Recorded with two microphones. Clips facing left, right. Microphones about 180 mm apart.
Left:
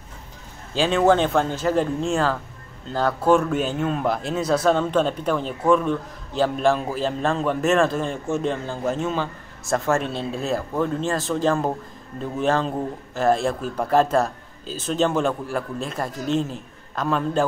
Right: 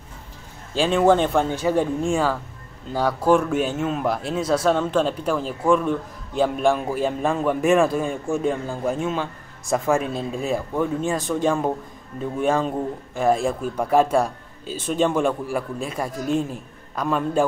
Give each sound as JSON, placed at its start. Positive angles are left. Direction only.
{"t": 0.7, "sound": "a man's voice", "side_deg": 0}
{"t": 10.3, "sound": "a man's voice", "side_deg": -10}
{"t": 11.2, "sound": "a man's voice", "side_deg": 0}